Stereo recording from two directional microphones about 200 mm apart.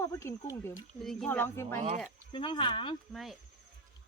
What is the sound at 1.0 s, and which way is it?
Speech, centre (ahead or behind).